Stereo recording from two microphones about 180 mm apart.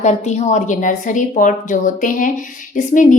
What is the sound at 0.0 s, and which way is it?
A woman's voice, 40° left (ahead or behind).